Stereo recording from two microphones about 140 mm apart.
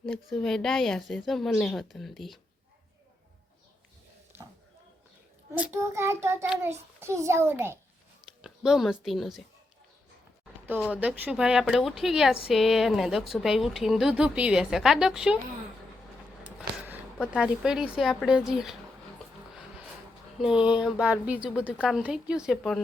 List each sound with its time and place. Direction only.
0.0 s a woman's voice: centre (ahead or behind)
4.3 s a sound: 15° right (ahead or behind)
5.5 s a child's voice: 15° right (ahead or behind)
8.4 s speech: 5° right (ahead or behind)
10.9 s a woman's voice: 10° right (ahead or behind)
16.6 s a sound: 10° right (ahead or behind)
17.3 s a woman's voice: 5° right (ahead or behind)
20.4 s a child's voice: 5° right (ahead or behind)